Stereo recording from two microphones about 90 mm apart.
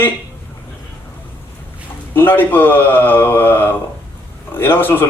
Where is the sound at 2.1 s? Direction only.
20° left (ahead or behind).